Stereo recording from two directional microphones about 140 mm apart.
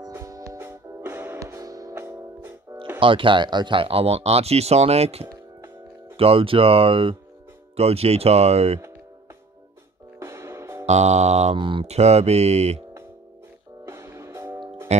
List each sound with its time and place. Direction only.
0.0 s music: 25° right (ahead or behind)
3.0 s speech: 35° right (ahead or behind)
10.1 s music: 20° right (ahead or behind)
10.9 s speech: 55° right (ahead or behind)
11.5 s speech: 35° right (ahead or behind)
13.8 s music: 20° right (ahead or behind)
14.9 s speech: 55° right (ahead or behind)